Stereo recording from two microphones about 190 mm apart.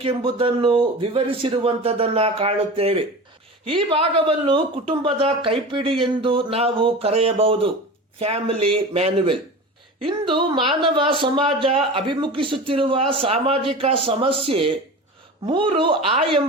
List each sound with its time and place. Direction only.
0.0 s speech: 25° right (ahead or behind)